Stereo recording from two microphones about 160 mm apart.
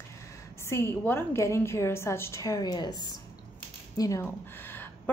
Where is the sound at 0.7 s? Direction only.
15° left (ahead or behind).